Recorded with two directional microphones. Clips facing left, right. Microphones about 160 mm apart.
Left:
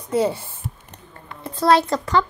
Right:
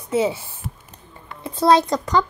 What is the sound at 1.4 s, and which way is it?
Speech, 15° right (ahead or behind).